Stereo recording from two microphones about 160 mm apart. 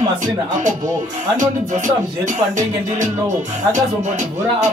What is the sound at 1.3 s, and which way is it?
Music, 50° right (ahead or behind).